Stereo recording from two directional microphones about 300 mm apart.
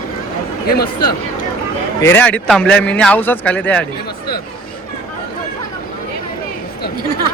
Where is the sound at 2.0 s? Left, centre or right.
Centre.